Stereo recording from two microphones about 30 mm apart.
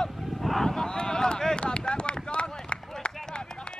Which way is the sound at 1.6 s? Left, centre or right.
Left.